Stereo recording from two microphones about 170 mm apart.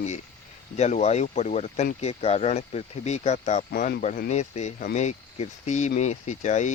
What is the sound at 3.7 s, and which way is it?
Speech, 60° left (ahead or behind).